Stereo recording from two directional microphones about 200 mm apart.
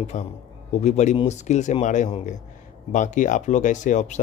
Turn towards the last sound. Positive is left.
turn(degrees=35)  # may be behind; listen again after turning